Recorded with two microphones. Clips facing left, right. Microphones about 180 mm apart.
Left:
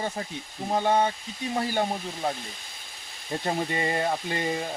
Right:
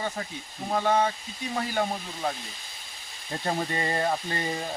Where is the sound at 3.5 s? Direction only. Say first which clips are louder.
Left 1 dB; 10° left (ahead or behind).